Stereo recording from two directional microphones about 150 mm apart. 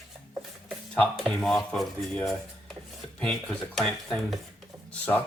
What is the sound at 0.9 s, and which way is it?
Speech, 5° left (ahead or behind).